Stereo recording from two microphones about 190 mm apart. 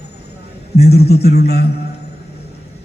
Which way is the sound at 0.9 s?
55° left (ahead or behind).